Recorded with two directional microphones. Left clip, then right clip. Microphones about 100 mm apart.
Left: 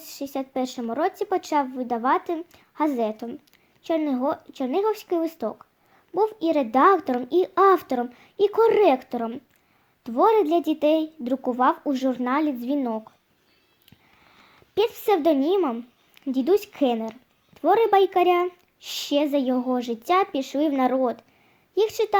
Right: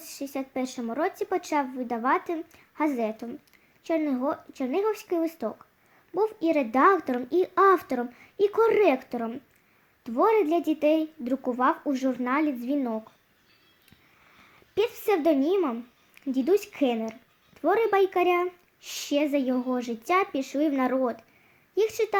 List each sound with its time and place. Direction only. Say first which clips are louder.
0.0 s speech: left 3 dB; 25° left (ahead or behind)
14.8 s speech: left 4 dB; 35° left (ahead or behind)